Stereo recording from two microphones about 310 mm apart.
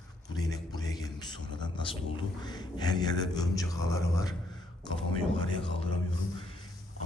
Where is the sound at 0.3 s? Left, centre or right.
Centre.